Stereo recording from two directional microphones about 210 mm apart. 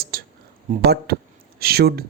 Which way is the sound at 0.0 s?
45° right (ahead or behind).